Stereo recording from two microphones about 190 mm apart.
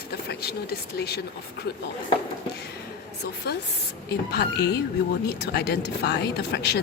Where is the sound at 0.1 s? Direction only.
55° left (ahead or behind).